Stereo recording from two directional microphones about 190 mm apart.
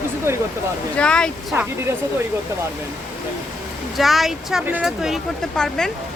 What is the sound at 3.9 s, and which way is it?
Speech, centre (ahead or behind).